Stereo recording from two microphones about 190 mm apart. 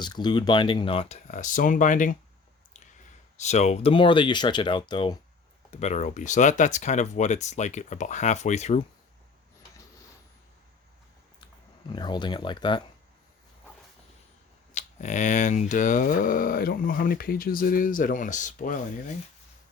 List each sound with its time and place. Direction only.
0.0 s speech: 20° left (ahead or behind); by 2.1 s 45° left (ahead or behind)
3.3 s speech: 35° left (ahead or behind)
5.7 s speech: 35° left (ahead or behind)
11.9 s speech: 25° left (ahead or behind)
14.7 s speech: 40° left (ahead or behind)